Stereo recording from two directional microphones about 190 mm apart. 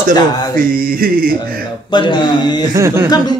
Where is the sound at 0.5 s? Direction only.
50° right (ahead or behind).